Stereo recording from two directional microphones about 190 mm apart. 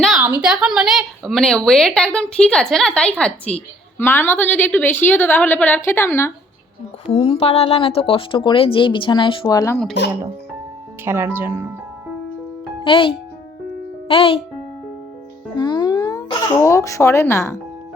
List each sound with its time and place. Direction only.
0.2 s a woman's voice: 10° right (ahead or behind); by 6.3 s 15° left (ahead or behind)
7.1 s speech: 30° left (ahead or behind)
11.0 s speech: 10° right (ahead or behind)
12.8 s speech: 25° left (ahead or behind)
15.5 s a child's voice: 20° left (ahead or behind)